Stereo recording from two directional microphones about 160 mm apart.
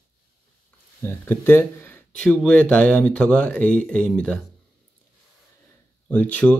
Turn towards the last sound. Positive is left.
turn(degrees=10)  # may be behind; listen again after turning